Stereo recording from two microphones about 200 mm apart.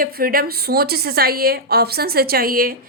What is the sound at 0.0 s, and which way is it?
A woman's voice, 45° right (ahead or behind).